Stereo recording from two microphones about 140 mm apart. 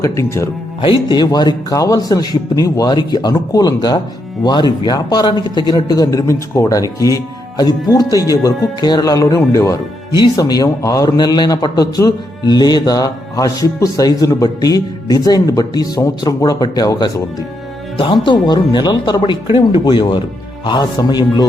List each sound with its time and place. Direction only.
0.0 s a man's voice: 20° left (ahead or behind)
0.8 s a man's voice: 35° left (ahead or behind)
17.9 s speech: 40° left (ahead or behind)